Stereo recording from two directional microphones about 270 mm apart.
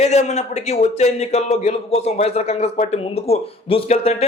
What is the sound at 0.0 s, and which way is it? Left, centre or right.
Speech, left.